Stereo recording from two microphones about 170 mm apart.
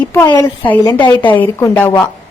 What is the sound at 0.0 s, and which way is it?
A woman's voice, 10° left (ahead or behind).